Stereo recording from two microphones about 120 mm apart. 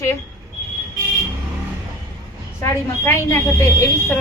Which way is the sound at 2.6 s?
20° left (ahead or behind).